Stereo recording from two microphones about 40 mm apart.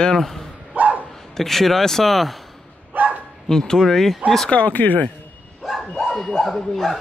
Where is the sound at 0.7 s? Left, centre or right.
Right.